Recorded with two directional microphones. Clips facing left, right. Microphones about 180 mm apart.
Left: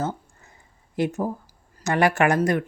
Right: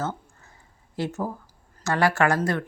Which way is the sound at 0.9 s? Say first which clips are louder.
Left 4 dB; 15° left (ahead or behind).